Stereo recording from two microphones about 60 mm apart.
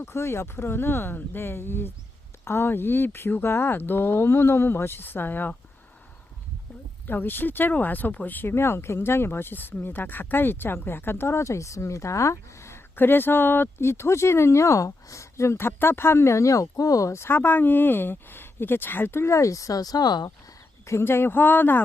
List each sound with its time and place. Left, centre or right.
0.0 s speech: left
7.1 s speech: left
8.4 s speech: left
17.2 s speech: left
20.8 s speech: left